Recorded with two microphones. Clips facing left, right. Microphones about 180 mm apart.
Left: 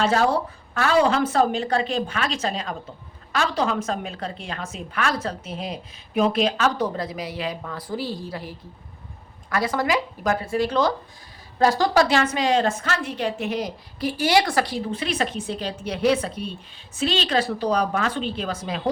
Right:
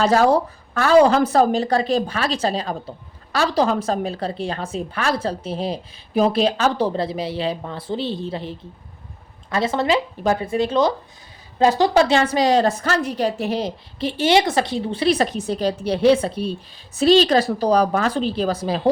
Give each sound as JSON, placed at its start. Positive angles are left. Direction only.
{"t": 0.0, "sound": "a woman's voice", "side_deg": -40}